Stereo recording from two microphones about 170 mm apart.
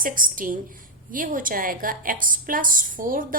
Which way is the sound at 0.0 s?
55° right (ahead or behind).